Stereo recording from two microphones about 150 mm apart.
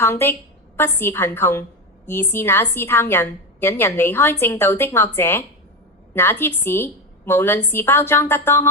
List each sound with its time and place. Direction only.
0.0 s a woman's voice: 15° left (ahead or behind)